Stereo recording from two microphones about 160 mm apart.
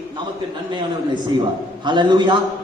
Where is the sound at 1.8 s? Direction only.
30° right (ahead or behind).